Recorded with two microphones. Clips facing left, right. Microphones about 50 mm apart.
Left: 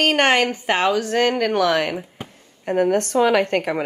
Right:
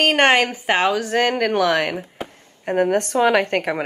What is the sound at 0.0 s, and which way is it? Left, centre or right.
Speech, centre.